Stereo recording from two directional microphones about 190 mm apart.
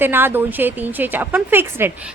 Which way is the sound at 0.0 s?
10° right (ahead or behind).